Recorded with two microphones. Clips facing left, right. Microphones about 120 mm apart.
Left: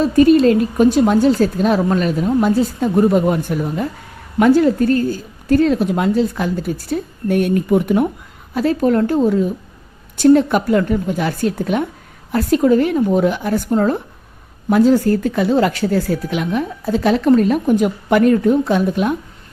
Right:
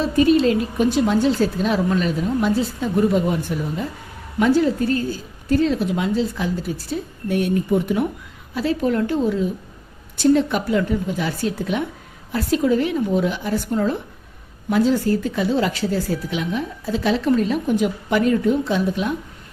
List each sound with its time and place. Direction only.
0.0 s speech: 45° left (ahead or behind)
8.5 s speech: 50° left (ahead or behind)